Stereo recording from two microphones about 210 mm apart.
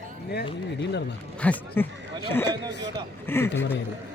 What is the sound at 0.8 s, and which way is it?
Speech, 55° left (ahead or behind).